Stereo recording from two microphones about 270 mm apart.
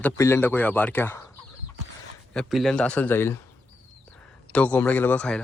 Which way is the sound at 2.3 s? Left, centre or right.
Centre.